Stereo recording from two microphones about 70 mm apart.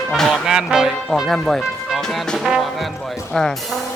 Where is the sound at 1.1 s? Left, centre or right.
Centre.